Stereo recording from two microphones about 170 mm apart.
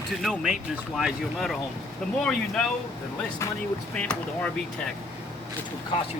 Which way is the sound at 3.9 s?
5° left (ahead or behind).